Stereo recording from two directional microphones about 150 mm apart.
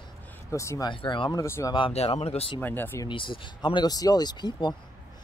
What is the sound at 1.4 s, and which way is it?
Speech, 20° left (ahead or behind).